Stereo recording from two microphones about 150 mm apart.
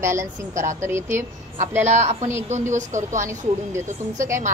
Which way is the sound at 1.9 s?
50° right (ahead or behind).